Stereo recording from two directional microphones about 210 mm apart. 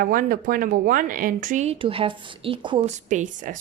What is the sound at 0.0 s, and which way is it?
Speech, 40° right (ahead or behind).